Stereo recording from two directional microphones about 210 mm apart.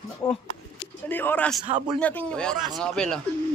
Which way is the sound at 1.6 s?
25° right (ahead or behind).